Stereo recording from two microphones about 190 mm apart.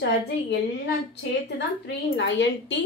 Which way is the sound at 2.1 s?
70° left (ahead or behind).